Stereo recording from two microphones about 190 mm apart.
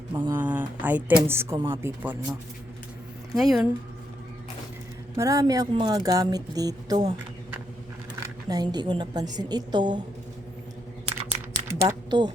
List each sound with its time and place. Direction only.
0.1 s speech: 15° right (ahead or behind)
3.3 s speech: centre (ahead or behind)
5.1 s a woman's voice: 15° right (ahead or behind)
8.2 s a woman's voice: 20° right (ahead or behind)
11.7 s a sound: 20° right (ahead or behind)